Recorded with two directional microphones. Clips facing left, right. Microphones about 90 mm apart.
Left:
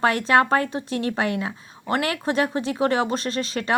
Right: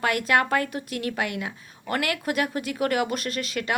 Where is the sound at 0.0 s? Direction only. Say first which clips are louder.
Left 4 dB; 30° left (ahead or behind).